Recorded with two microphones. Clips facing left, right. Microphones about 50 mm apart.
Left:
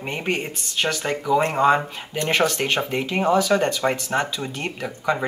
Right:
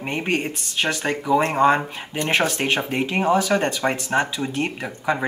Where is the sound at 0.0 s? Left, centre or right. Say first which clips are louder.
Right 2 dB; centre.